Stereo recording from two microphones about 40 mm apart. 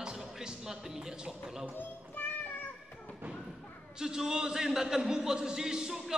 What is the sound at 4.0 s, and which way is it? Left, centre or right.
Speech, centre.